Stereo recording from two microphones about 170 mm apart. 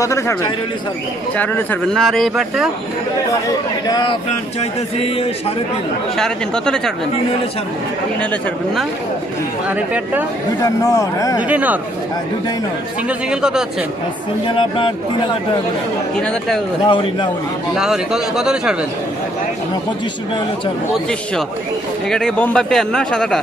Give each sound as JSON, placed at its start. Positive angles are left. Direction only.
{"t": 0.0, "sound": "speech", "side_deg": 15}
{"t": 3.8, "sound": "speech", "side_deg": 25}
{"t": 6.1, "sound": "speech", "side_deg": 5}
{"t": 8.2, "sound": "speech", "side_deg": 5}
{"t": 9.7, "sound": "speech", "side_deg": -10}
{"t": 10.6, "sound": "speech", "side_deg": 20}
{"t": 11.4, "sound": "speech", "side_deg": -10}
{"t": 13.3, "sound": "speech", "side_deg": -5}
{"t": 14.4, "sound": "speech", "side_deg": 30}
{"t": 16.2, "sound": "speech", "side_deg": 5}
{"t": 16.8, "sound": "speech", "side_deg": 30}
{"t": 17.7, "sound": "speech", "side_deg": -5}
{"t": 22.1, "sound": "speech", "side_deg": 5}